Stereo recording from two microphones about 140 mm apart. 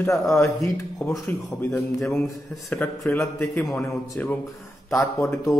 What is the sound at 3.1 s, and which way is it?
A man's voice, 20° left (ahead or behind).